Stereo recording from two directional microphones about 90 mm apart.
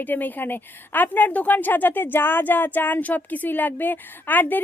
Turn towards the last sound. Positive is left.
turn(degrees=20)  # may be behind; listen again after turning